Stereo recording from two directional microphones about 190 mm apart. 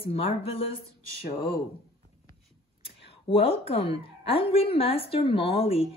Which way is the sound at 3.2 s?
30° left (ahead or behind).